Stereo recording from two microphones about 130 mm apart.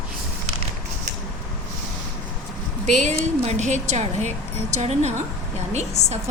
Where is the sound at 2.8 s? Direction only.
65° right (ahead or behind).